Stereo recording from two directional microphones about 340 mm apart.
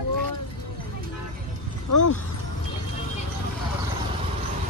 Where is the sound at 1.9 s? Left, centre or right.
Left.